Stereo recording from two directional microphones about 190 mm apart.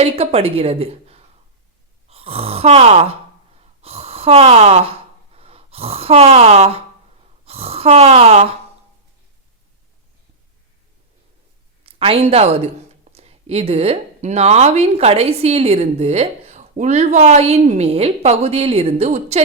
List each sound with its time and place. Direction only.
0.0 s speech: 30° right (ahead or behind)
2.0 s a sound: 30° right (ahead or behind)
7.4 s speech: 30° right (ahead or behind)
11.8 s a woman's voice: 30° right (ahead or behind)